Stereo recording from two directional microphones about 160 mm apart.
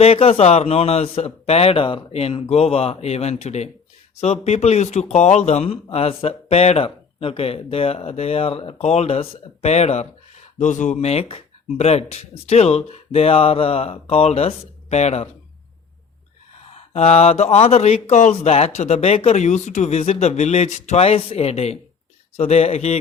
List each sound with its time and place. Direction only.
0.0 s a man's voice: 40° left (ahead or behind)
16.7 s a man's voice: 40° left (ahead or behind)